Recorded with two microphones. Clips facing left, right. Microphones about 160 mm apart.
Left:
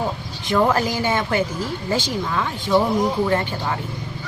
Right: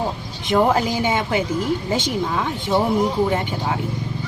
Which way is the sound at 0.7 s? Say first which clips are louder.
Right 1 dB; 15° right (ahead or behind).